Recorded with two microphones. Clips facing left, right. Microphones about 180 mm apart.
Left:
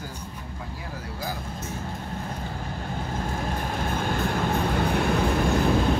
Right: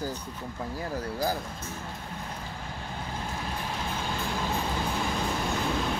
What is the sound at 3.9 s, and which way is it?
Vehicle, 55° left (ahead or behind).